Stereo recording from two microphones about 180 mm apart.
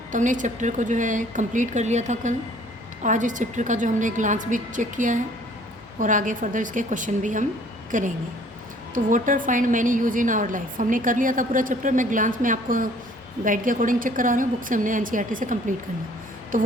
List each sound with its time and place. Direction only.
0.1 s a woman's voice: 45° right (ahead or behind)
16.5 s a woman's voice: 45° right (ahead or behind)